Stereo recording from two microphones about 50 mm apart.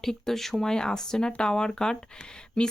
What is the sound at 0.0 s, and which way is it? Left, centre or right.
Speech, centre.